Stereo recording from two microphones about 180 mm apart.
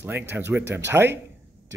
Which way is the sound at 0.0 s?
10° right (ahead or behind).